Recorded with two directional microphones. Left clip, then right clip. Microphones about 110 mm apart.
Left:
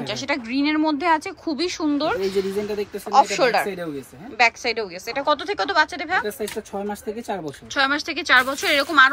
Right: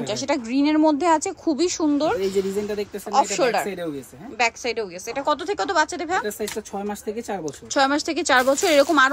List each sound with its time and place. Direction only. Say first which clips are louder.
0.0 s speech: right 1 dB; 40° right (ahead or behind)
6.9 s speech: even; 25° left (ahead or behind)
7.7 s a woman's voice: right 1 dB; 50° right (ahead or behind)